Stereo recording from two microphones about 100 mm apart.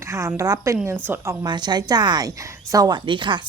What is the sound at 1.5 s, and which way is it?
A woman's voice, 45° right (ahead or behind).